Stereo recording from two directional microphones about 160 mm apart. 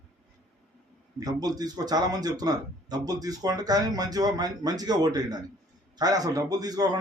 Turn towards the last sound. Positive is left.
turn(degrees=-25)  # may be behind; listen again after turning